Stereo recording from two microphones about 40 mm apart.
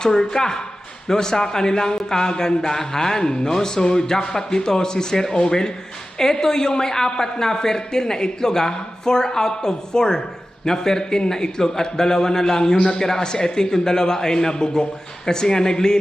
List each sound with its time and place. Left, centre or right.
0.0 s speech: centre